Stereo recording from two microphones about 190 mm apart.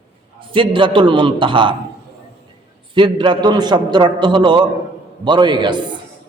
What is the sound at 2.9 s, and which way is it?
A man's voice, 25° right (ahead or behind).